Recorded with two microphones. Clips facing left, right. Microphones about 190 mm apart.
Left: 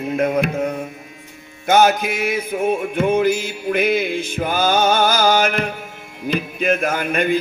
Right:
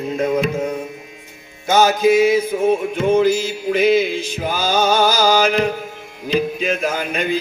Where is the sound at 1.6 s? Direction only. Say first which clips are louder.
Right 1 dB; 60° left (ahead or behind).